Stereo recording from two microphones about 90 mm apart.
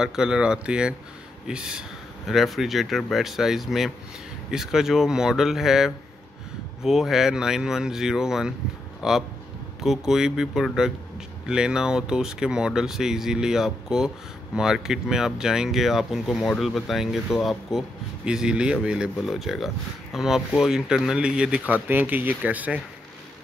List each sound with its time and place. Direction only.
0.0 s speech: 10° right (ahead or behind)